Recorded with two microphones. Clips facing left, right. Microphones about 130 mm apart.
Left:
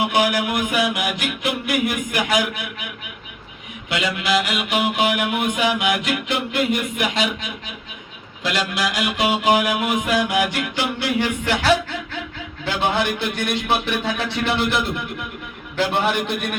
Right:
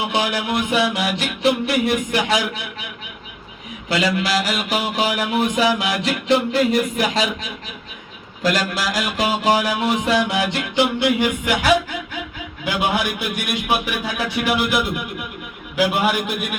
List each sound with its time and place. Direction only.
0.1 s speech: 25° right (ahead or behind)
0.9 s mantra: 30° right (ahead or behind)
3.8 s mantra: 35° right (ahead or behind)
8.4 s mantra: 40° right (ahead or behind)
10.5 s a man's voice: 20° right (ahead or behind); by 16.5 s 5° right (ahead or behind)